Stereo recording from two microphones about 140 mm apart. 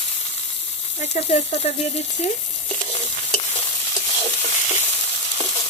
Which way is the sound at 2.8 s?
40° left (ahead or behind).